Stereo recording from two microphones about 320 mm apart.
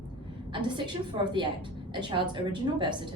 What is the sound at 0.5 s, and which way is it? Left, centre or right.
A woman's voice, centre.